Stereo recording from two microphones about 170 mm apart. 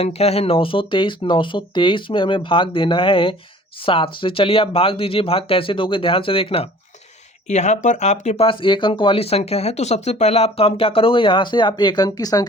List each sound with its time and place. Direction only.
0.0 s speech: 35° left (ahead or behind); by 12.5 s 20° left (ahead or behind)